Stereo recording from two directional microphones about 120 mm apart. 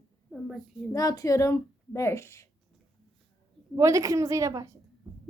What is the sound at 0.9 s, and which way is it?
A woman's voice, 30° left (ahead or behind).